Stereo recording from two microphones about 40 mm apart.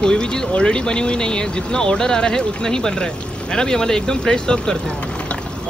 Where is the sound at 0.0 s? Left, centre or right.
Left.